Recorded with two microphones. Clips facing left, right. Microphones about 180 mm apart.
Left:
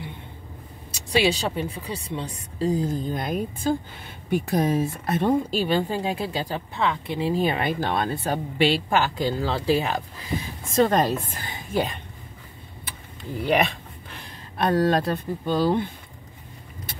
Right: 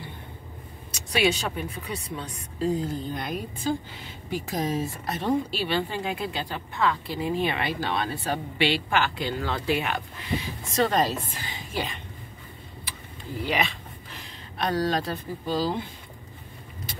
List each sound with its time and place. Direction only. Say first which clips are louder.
0.9 s speech: left 2 dB; 30° left (ahead or behind)
6.8 s speech: left 1 dB; 20° left (ahead or behind)
7.3 s speech: left 4 dB; 40° left (ahead or behind)
10.7 s a woman's voice: left 4 dB; 50° left (ahead or behind)
13.5 s speech: left 6 dB; 55° left (ahead or behind)